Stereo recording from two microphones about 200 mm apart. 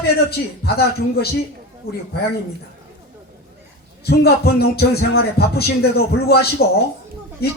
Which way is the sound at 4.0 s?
50° left (ahead or behind).